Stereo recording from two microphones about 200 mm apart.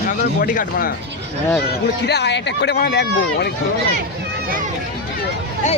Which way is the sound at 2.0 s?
55° left (ahead or behind).